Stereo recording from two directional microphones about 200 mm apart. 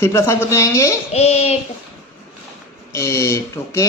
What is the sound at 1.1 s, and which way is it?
Speech, 30° left (ahead or behind).